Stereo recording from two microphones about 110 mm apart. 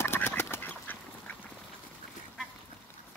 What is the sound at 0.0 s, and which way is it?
Duck, 20° left (ahead or behind).